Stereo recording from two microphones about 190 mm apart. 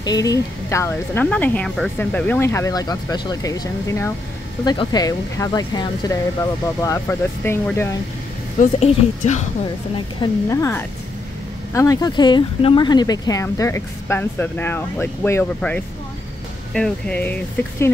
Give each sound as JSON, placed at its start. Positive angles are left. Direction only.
{"t": 0.0, "sound": "speech", "side_deg": 20}
{"t": 8.5, "sound": "a woman's voice", "side_deg": 35}
{"t": 9.9, "sound": "speech", "side_deg": 20}